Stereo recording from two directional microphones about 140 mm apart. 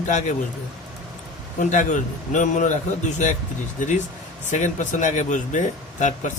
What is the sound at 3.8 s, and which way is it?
Speech, 60° left (ahead or behind).